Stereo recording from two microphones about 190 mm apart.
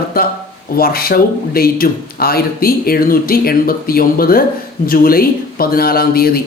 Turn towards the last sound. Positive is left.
turn(degrees=50)  # may be behind; listen again after turning